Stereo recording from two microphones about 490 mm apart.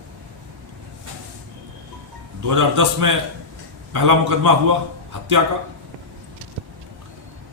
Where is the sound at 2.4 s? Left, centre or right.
Right.